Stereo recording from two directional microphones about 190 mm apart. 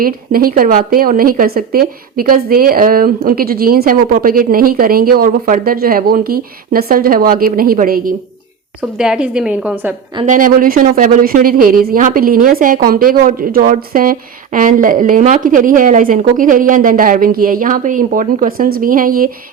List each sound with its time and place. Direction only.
0.0 s speech: 50° right (ahead or behind)
8.8 s a woman's voice: 5° right (ahead or behind)
10.2 s speech: 45° right (ahead or behind)